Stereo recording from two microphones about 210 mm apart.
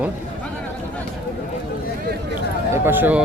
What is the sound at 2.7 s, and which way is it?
Speech, 10° right (ahead or behind).